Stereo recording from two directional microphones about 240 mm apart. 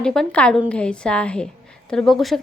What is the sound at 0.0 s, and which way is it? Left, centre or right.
A woman's voice, centre.